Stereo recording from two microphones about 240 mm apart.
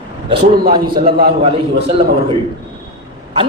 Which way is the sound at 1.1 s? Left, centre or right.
Right.